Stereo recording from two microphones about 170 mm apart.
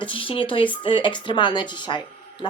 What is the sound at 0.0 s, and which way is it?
Speech, 30° left (ahead or behind).